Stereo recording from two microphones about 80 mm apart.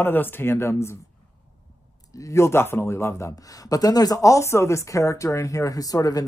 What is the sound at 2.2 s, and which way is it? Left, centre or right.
Speech, left.